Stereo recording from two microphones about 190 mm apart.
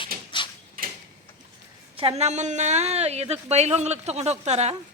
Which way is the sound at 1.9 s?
30° right (ahead or behind).